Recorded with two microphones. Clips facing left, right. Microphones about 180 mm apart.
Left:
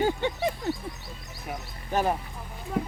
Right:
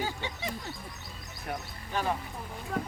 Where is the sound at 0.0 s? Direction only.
55° left (ahead or behind).